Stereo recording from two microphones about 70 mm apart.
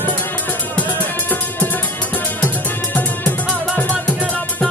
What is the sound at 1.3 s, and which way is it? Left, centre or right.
Music, left.